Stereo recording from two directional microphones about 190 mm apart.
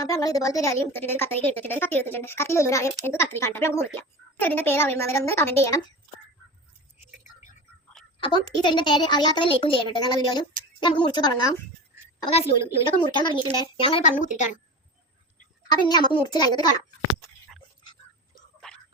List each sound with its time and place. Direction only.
0.1 s speech: 20° left (ahead or behind)
8.2 s a woman's voice: 25° left (ahead or behind); by 14.5 s 40° left (ahead or behind)
15.9 s a woman's voice: 20° left (ahead or behind)